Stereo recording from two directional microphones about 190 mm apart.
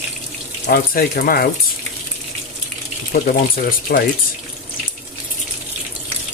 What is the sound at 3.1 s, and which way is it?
Speech, 50° left (ahead or behind).